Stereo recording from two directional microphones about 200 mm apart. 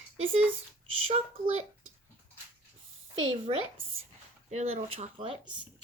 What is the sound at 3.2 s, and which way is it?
A woman's voice, 25° right (ahead or behind).